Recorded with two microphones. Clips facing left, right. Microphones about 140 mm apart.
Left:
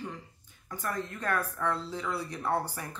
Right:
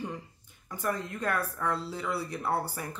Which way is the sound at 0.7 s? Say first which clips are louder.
Right 2 dB; 10° right (ahead or behind).